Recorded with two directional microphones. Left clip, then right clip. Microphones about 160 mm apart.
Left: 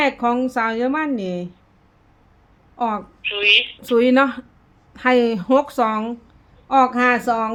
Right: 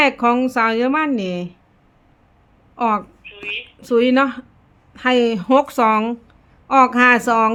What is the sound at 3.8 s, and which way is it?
A woman's voice, 5° left (ahead or behind).